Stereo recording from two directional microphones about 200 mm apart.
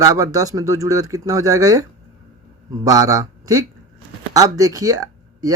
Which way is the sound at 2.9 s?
15° right (ahead or behind).